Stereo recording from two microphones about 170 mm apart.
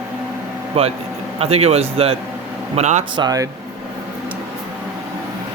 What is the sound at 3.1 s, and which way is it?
Speech, 25° right (ahead or behind).